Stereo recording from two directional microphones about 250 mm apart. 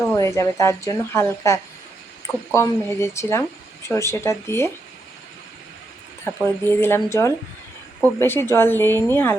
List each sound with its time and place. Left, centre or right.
0.0 s speech: centre
6.2 s speech: centre